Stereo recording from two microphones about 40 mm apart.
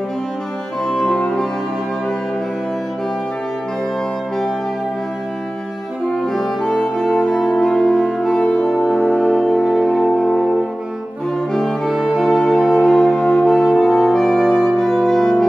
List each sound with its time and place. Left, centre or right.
0.8 s music: centre
6.1 s brass instrument: centre
6.6 s music: left
8.4 s french horn: left
9.1 s music: centre
9.5 s music: centre
11.5 s brass instrument: centre
12.4 s music: centre
13.7 s music: centre